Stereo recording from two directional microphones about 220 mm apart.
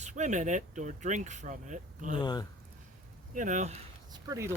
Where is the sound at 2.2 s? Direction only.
20° left (ahead or behind).